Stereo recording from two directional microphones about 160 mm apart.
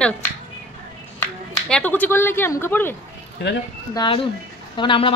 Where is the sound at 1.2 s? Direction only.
10° left (ahead or behind).